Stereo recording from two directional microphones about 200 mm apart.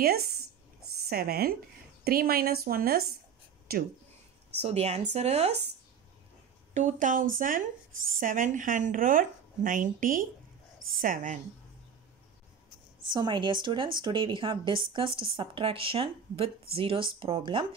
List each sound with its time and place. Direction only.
0.0 s speech: 50° right (ahead or behind)
4.6 s speech: 30° right (ahead or behind)
6.7 s speech: 40° right (ahead or behind)
13.1 s speech: 25° right (ahead or behind)